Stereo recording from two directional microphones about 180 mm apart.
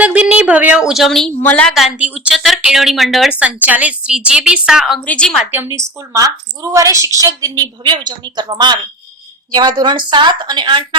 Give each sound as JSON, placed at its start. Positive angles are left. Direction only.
{"t": 0.0, "sound": "a woman's voice", "side_deg": -5}